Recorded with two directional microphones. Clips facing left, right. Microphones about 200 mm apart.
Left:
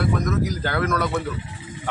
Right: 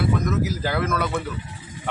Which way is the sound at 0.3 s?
5° right (ahead or behind).